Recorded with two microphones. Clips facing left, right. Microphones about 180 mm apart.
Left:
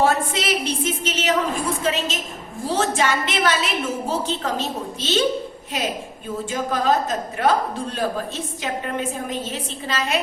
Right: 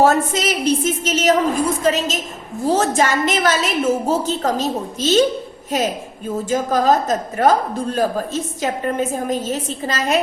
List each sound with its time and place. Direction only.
0.0 s a woman's voice: 40° right (ahead or behind)